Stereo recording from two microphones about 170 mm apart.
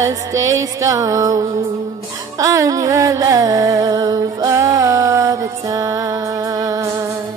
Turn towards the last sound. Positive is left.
turn(degrees=-15)  # may be behind; listen again after turning